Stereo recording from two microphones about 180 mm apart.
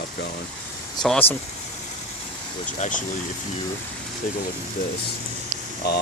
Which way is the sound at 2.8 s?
40° left (ahead or behind).